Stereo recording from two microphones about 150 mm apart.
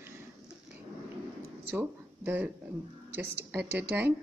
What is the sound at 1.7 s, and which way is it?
Speech, 15° right (ahead or behind).